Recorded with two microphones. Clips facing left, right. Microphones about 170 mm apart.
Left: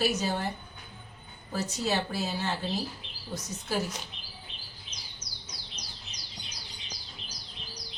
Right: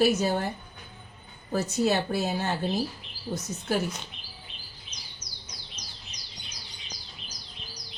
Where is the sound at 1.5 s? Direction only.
50° right (ahead or behind).